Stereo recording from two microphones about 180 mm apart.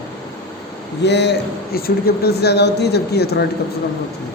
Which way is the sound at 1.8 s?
55° left (ahead or behind).